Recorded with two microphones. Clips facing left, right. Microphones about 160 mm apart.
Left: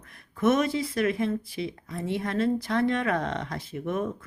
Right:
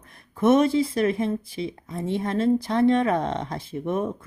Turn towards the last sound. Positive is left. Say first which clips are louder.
# right 3 dB
turn(degrees=-30)  # may be behind; listen again after turning